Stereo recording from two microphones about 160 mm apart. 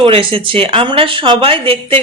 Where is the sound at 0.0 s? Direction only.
35° right (ahead or behind).